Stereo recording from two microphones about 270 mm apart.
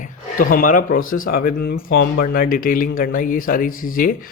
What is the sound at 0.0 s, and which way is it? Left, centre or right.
Speech, left.